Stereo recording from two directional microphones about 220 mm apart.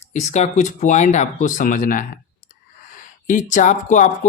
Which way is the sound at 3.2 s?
35° left (ahead or behind).